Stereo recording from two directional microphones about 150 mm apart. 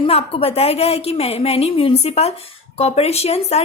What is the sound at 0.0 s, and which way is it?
A woman's voice, 40° left (ahead or behind).